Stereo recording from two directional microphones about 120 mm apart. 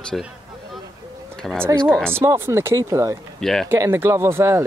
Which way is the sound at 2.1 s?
20° right (ahead or behind).